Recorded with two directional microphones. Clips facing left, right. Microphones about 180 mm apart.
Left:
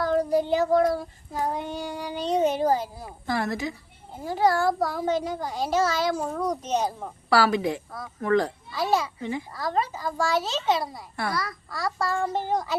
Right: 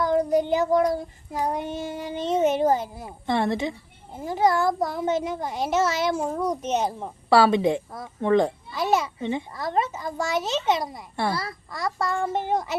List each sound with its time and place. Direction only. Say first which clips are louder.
0.0 s child singing: right 2 dB; 20° right (ahead or behind)
2.4 s a child's voice: right 2 dB; 20° right (ahead or behind)